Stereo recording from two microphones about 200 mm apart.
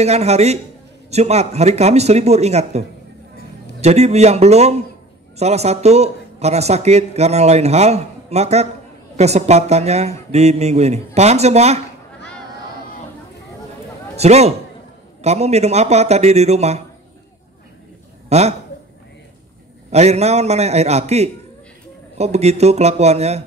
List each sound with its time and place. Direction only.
0.0 s a man's voice: 35° right (ahead or behind)
3.8 s a man's voice: 35° right (ahead or behind)
14.1 s a man's voice: 35° right (ahead or behind)
18.3 s a man's voice: 35° right (ahead or behind)
19.9 s a man's voice: 35° right (ahead or behind)